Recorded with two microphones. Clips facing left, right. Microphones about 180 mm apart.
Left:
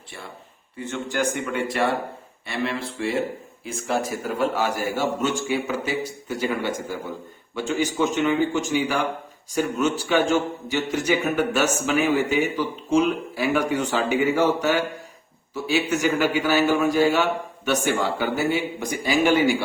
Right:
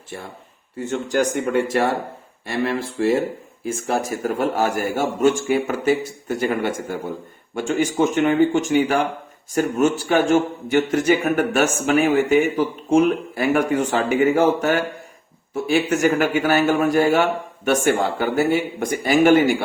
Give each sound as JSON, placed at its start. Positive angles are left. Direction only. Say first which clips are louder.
{"t": 0.8, "sound": "speech", "louder": "right 5 dB", "side_deg": -40}